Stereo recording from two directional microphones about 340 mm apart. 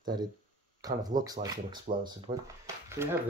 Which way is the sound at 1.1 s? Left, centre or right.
Centre.